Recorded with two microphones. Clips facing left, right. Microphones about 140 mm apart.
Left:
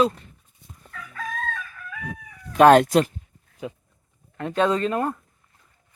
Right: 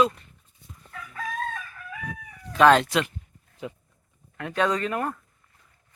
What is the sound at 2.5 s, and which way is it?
Speech, 50° left (ahead or behind).